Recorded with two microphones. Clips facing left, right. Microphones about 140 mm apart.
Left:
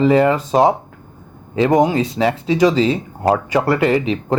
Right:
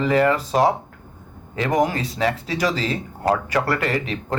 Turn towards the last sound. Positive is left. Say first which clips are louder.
# left 8 dB
turn(degrees=25)  # may be behind; listen again after turning